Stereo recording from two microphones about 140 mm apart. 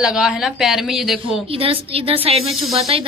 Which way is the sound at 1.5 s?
40° right (ahead or behind).